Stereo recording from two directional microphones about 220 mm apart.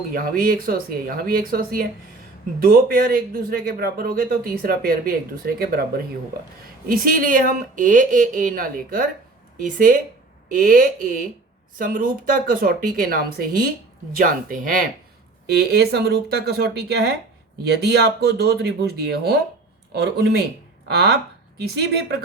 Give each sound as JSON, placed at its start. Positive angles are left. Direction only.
{"t": 0.1, "sound": "a man's voice", "side_deg": -40}